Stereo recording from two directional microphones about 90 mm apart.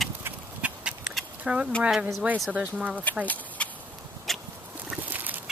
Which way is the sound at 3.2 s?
15° left (ahead or behind).